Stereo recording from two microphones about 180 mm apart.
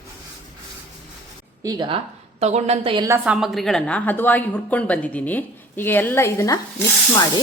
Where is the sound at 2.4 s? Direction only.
40° right (ahead or behind).